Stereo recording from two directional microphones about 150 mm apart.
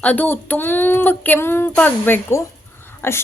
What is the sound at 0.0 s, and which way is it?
A woman's voice, 10° left (ahead or behind).